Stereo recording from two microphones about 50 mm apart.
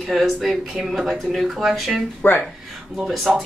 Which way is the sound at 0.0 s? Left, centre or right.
Centre.